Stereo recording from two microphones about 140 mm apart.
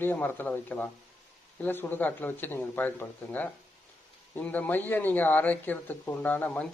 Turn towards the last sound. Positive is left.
turn(degrees=10)  # may be behind; listen again after turning